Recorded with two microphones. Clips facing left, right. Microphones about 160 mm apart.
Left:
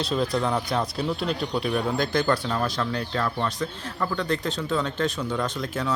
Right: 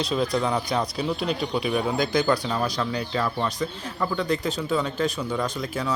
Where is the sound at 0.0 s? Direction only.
Centre (ahead or behind).